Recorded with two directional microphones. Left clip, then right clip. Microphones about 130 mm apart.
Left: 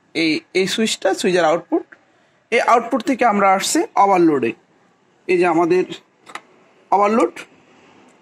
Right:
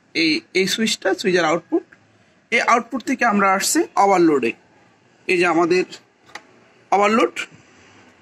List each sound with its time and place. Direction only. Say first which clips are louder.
0.1 s speech: even; 70° left (ahead or behind)
1.6 s speech: left 1 dB; 30° left (ahead or behind)
2.5 s speech: left 2 dB; 80° left
3.0 s speech: left 3 dB; 55° left (ahead or behind)
3.3 s a man's voice: left 2 dB; 45° left (ahead or behind)
6.9 s a man's voice: left 1 dB; 20° left (ahead or behind)